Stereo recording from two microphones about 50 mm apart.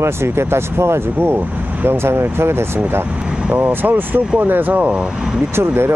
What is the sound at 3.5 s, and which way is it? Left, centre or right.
Speech, right.